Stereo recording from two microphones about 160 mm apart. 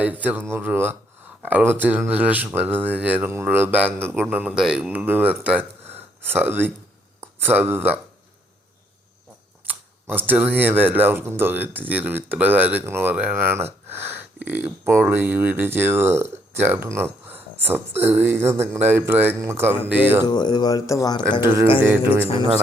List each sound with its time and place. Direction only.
0.0 s speech: 10° right (ahead or behind)
9.6 s speech: 10° right (ahead or behind)
20.2 s speech: 25° left (ahead or behind)
21.4 s speech: 15° right (ahead or behind)